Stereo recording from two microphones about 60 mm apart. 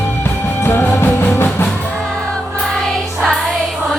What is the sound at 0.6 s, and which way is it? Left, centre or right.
Music, left.